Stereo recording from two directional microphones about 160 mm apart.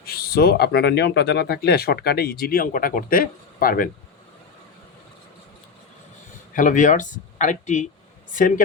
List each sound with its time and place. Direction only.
0.0 s speech: 75° left (ahead or behind)
6.5 s a man's voice: 55° left (ahead or behind)